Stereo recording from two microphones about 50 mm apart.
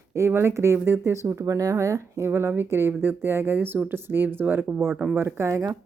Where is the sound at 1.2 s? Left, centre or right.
Right.